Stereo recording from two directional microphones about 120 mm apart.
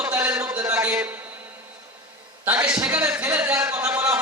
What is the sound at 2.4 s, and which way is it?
A man's voice, 15° right (ahead or behind).